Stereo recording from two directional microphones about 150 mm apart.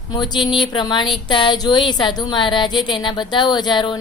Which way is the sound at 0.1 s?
30° left (ahead or behind).